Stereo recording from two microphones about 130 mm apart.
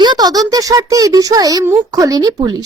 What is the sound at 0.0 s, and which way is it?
A woman's voice, 30° right (ahead or behind).